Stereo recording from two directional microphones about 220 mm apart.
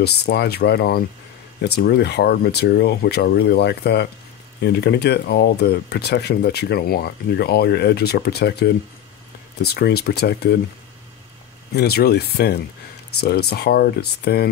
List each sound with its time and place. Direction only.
0.0 s speech: 50° left (ahead or behind)
11.7 s speech: 45° left (ahead or behind)